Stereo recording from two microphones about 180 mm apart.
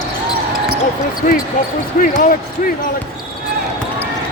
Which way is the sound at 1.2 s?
45° left (ahead or behind).